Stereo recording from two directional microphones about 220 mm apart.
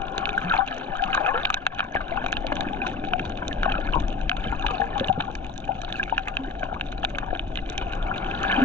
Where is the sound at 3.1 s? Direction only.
10° left (ahead or behind).